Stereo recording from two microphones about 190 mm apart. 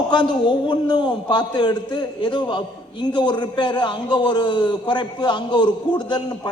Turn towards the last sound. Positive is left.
turn(degrees=25)  # may be behind; listen again after turning